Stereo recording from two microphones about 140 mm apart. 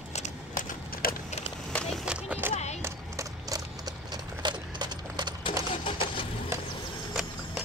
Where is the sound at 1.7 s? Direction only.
5° left (ahead or behind); by 2.5 s 10° right (ahead or behind).